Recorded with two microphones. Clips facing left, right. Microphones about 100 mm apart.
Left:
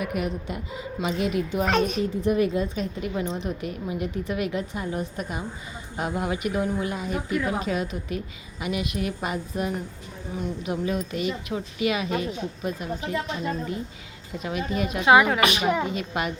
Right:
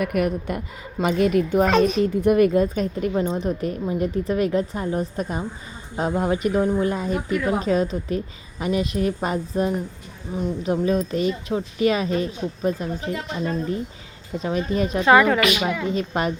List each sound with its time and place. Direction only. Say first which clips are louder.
0.0 s a woman's voice: right 6 dB; 55° right (ahead or behind); by 13.1 s 35° right (ahead or behind)
14.3 s a woman's voice: right 5 dB; 35° right (ahead or behind)
15.0 s a woman's voice: right 2 dB; 10° left (ahead or behind)
15.4 s a woman's voice: right 1 dB; 30° left (ahead or behind)
15.9 s a woman's voice: right 5 dB; 35° right (ahead or behind)